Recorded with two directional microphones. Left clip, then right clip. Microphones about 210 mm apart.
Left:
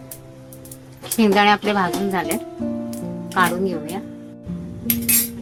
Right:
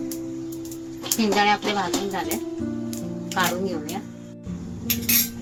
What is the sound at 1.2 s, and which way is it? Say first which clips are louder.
Speech: left 5 dB; 25° left (ahead or behind).